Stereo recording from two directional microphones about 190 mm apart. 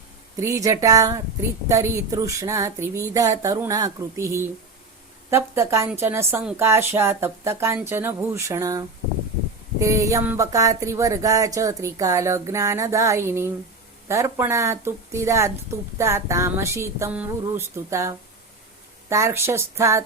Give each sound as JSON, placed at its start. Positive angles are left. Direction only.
{"t": 0.3, "sound": "speech", "side_deg": -15}
{"t": 9.8, "sound": "speech", "side_deg": -15}